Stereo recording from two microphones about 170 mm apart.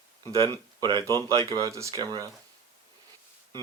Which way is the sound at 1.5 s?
20° right (ahead or behind).